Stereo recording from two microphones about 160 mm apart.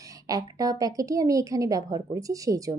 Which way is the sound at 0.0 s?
20° right (ahead or behind).